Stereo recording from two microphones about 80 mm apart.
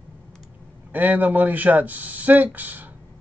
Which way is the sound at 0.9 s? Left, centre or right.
Right.